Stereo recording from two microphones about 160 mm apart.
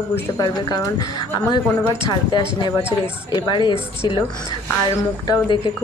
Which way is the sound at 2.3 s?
30° left (ahead or behind).